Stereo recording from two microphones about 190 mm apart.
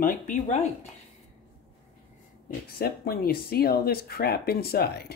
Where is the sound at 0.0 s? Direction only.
45° left (ahead or behind).